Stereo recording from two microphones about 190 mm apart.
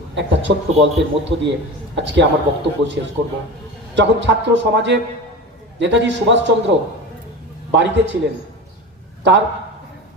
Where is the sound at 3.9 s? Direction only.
70° right (ahead or behind).